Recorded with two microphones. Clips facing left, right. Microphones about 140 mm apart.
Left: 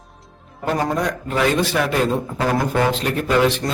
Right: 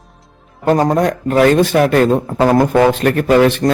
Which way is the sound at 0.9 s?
50° right (ahead or behind).